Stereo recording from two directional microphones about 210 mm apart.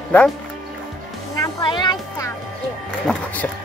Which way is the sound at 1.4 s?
20° left (ahead or behind).